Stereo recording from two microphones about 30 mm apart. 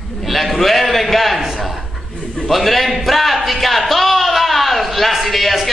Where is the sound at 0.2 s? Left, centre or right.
Centre.